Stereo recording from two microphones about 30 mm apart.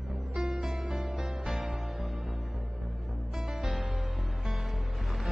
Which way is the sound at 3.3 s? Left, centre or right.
Centre.